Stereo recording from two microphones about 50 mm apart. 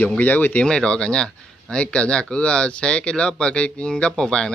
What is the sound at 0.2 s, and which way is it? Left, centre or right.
Speech, left.